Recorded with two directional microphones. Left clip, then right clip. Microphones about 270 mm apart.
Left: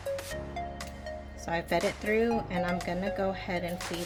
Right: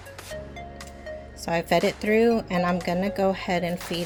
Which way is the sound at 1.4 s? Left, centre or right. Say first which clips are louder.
Right 7 dB; right.